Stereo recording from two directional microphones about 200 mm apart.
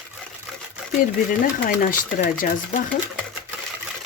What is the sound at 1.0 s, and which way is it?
Speech, 45° left (ahead or behind).